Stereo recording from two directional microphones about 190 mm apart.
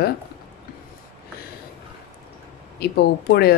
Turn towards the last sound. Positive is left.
turn(degrees=60)  # may be behind; listen again after turning